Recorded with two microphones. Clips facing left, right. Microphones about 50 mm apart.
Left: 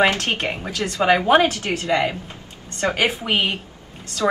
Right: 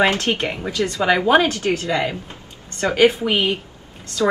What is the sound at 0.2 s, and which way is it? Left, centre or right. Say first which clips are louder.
Speech: right 2 dB; left.